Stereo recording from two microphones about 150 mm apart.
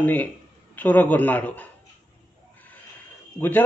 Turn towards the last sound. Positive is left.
turn(degrees=15)  # may be behind; listen again after turning